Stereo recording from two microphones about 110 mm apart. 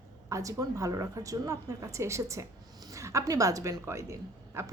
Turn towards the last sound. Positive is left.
turn(degrees=-25)  # may be behind; listen again after turning